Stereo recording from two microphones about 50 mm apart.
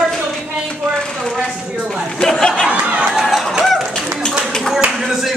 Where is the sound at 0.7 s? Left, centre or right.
Centre.